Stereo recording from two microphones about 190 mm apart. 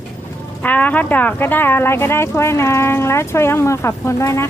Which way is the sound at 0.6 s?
10° left (ahead or behind).